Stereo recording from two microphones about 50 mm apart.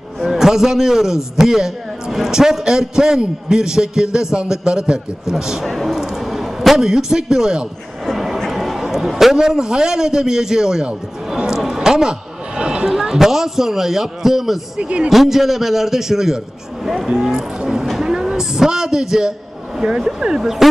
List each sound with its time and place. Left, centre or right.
0.2 s a man's voice: centre
5.7 s a sound: centre
6.8 s a man's voice: centre
14.8 s a man's voice: right
15.0 s a man's voice: centre
17.8 s a sound: centre
19.8 s a man's voice: centre